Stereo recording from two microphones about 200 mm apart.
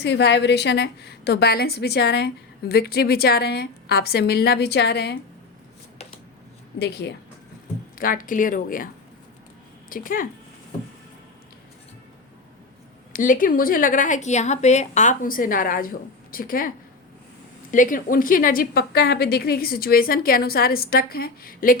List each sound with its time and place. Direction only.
0.0 s a woman's voice: 60° left (ahead or behind)
6.7 s a woman's voice: 55° left (ahead or behind)
7.9 s a woman's voice: 45° left (ahead or behind)
9.9 s a woman's voice: 45° left (ahead or behind)
13.1 s a woman's voice: 45° left (ahead or behind)